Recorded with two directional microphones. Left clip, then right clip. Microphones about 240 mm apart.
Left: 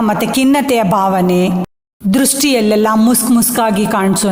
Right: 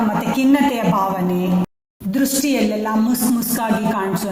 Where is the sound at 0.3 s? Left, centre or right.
Left.